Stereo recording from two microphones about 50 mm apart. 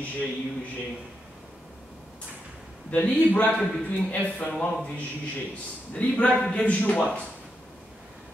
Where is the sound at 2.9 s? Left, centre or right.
Left.